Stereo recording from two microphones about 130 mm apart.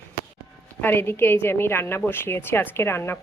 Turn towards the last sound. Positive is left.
turn(degrees=20)  # may be behind; listen again after turning